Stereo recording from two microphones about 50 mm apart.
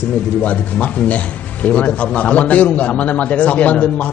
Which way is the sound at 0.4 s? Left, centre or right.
Left.